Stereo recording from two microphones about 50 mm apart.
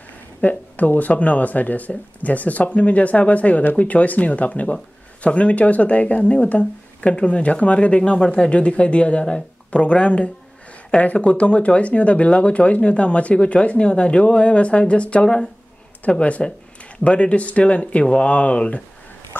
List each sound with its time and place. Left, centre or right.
0.4 s speech: left